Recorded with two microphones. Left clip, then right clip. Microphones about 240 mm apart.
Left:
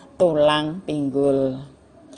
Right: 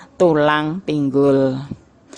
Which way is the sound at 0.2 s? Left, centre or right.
Right.